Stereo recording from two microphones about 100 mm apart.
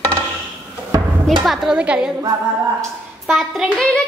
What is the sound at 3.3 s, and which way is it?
Hands, centre (ahead or behind).